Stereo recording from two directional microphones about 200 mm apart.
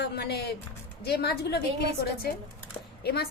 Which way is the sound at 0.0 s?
55° left (ahead or behind).